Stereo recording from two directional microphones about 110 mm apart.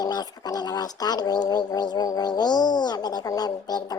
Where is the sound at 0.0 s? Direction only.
35° left (ahead or behind).